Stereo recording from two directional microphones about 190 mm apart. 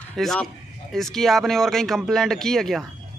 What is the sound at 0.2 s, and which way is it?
A man's voice, 5° left (ahead or behind).